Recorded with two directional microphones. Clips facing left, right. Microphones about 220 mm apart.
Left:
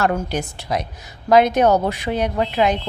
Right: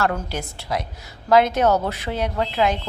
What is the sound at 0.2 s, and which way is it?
A woman's voice, 15° left (ahead or behind).